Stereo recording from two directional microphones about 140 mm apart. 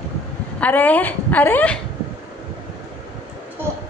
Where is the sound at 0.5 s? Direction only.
10° left (ahead or behind).